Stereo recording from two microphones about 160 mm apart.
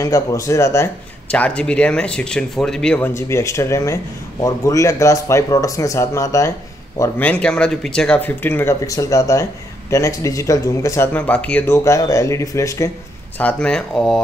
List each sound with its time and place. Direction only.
0.0 s speech: 20° left (ahead or behind)
1.3 s speech: 5° left (ahead or behind)
13.4 s speech: 10° left (ahead or behind)